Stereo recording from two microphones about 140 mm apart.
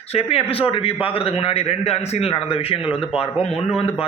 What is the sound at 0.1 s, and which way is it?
A man's voice, 45° left (ahead or behind).